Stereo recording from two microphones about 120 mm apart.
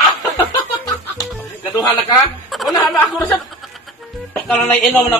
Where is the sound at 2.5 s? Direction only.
Centre (ahead or behind).